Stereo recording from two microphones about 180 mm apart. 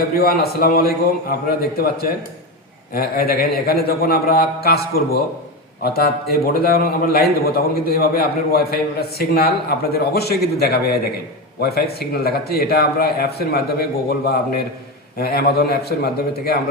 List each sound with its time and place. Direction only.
0.1 s a man's voice: 55° left (ahead or behind)
15.2 s a man's voice: 60° left (ahead or behind)